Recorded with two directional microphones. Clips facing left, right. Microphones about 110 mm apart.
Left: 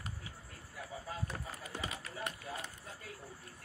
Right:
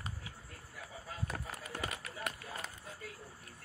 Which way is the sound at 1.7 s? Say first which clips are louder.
Right 1 dB; 55° right (ahead or behind).